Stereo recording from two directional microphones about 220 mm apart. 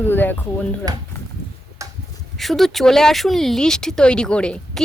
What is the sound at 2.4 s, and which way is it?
A woman's voice, centre (ahead or behind).